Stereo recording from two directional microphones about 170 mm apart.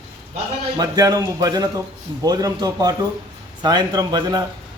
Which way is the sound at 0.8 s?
20° right (ahead or behind).